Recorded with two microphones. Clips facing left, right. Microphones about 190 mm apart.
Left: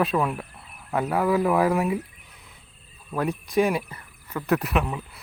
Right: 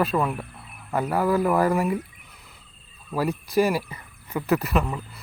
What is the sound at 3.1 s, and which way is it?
Speech, 5° right (ahead or behind).